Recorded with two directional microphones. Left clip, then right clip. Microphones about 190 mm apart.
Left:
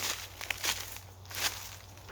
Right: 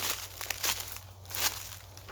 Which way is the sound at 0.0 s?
10° right (ahead or behind).